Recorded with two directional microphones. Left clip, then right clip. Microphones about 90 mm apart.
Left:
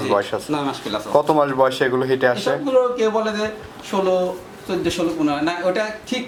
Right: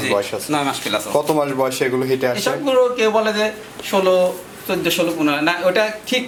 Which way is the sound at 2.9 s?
15° right (ahead or behind).